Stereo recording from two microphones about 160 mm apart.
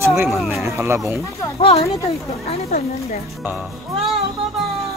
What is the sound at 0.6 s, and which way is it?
Speech, 15° right (ahead or behind).